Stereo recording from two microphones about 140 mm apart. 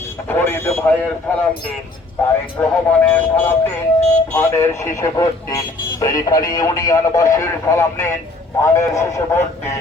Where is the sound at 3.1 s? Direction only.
15° left (ahead or behind).